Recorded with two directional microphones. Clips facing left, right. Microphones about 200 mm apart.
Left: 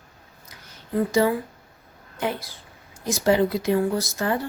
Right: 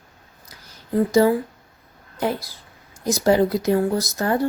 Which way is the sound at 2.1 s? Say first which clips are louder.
Right 3 dB; 40° right (ahead or behind).